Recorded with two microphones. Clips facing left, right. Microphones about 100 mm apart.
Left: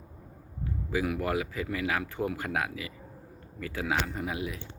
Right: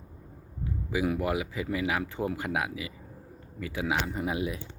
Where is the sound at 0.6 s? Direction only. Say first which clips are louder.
Right 1 dB; 20° right (ahead or behind).